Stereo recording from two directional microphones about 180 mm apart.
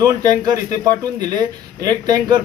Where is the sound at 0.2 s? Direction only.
20° right (ahead or behind).